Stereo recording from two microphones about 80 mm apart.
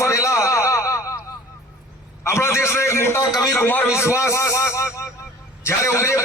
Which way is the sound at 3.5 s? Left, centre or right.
Left.